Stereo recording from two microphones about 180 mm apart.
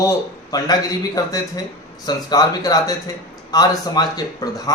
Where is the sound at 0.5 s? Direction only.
20° left (ahead or behind).